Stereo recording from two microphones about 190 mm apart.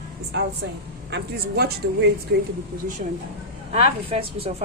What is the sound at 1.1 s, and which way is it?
Speech, 60° right (ahead or behind).